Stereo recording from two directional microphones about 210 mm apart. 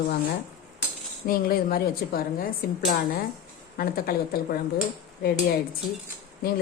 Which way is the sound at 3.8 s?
45° left (ahead or behind).